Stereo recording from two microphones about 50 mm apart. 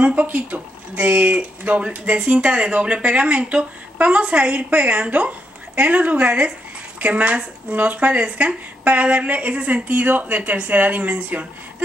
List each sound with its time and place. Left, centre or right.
0.0 s speech: right